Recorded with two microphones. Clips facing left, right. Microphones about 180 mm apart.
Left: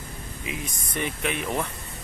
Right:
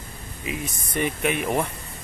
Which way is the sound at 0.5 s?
5° right (ahead or behind).